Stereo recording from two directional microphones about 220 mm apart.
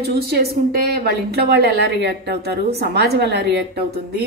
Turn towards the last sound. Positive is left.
turn(degrees=-50)  # may be behind; listen again after turning